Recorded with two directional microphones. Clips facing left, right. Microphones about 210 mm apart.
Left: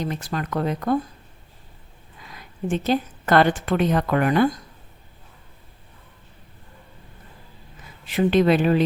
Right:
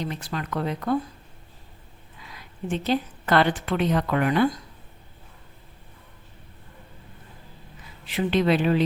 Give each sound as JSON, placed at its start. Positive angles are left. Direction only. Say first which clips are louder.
{"t": 0.0, "sound": "a woman's voice", "louder": "left 3 dB", "side_deg": 45}
{"t": 2.3, "sound": "a woman's voice", "louder": "left 4 dB", "side_deg": 45}
{"t": 8.0, "sound": "a woman's voice", "louder": "left 4 dB", "side_deg": 45}